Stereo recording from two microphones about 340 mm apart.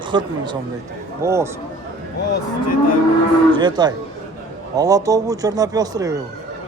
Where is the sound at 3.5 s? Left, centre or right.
Centre.